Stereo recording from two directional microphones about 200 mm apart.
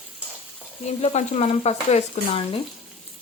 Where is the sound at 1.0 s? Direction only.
30° left (ahead or behind).